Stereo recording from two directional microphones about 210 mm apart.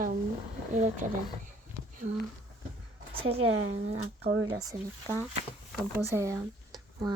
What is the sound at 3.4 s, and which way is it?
Speech, 80° right.